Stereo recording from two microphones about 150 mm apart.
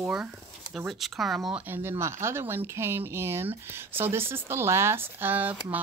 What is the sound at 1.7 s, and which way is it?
Speech, 15° right (ahead or behind).